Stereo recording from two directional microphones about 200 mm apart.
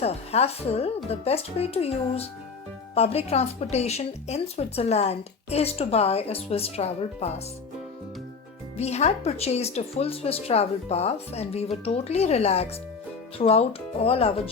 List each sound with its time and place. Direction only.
0.0 s speech: 30° left (ahead or behind)
2.9 s speech: 30° left (ahead or behind)
8.8 s speech: 30° left (ahead or behind)